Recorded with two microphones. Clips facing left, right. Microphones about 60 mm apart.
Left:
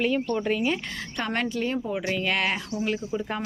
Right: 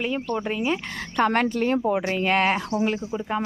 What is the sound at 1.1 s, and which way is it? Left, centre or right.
Speech, right.